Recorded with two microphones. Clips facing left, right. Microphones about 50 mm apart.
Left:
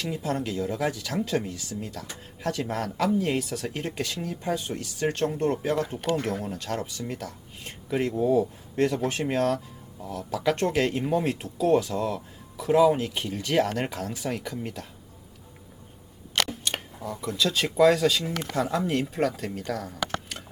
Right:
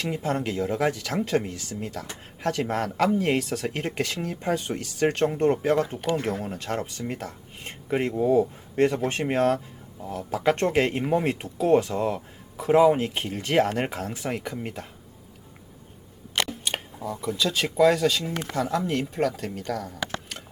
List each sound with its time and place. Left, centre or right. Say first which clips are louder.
0.0 s speech: right 2 dB; right
6.1 s speech: right 1 dB; right
13.7 s speech: right 2 dB; right
16.5 s speech: right 1 dB; centre